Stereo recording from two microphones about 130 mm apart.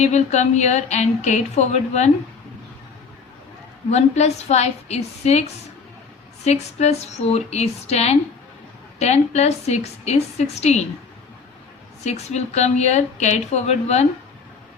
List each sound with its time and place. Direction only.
0.0 s a woman's voice: 60° left (ahead or behind)
3.9 s a woman's voice: 60° left (ahead or behind)
12.0 s a woman's voice: 60° left (ahead or behind)